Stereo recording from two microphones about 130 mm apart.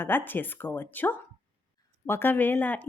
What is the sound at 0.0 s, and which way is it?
A woman's voice, 15° left (ahead or behind).